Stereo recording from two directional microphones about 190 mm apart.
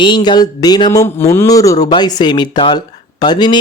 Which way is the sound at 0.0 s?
25° left (ahead or behind).